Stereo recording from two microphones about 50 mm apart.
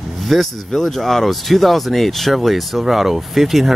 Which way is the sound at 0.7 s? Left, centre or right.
Centre.